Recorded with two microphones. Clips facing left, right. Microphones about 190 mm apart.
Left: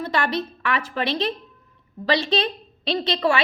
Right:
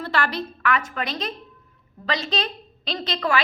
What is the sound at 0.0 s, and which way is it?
A woman's voice, 20° left (ahead or behind).